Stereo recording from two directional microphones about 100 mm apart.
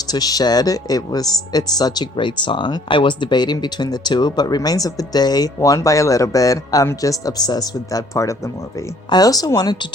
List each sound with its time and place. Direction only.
0.1 s speech: 40° left (ahead or behind)